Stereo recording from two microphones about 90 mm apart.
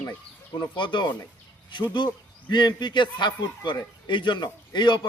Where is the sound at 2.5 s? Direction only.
55° left (ahead or behind).